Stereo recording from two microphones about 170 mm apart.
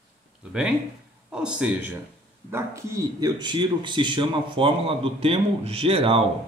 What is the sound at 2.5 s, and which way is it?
Speech, 15° right (ahead or behind).